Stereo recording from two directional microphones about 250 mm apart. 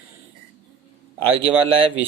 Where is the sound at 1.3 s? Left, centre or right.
Right.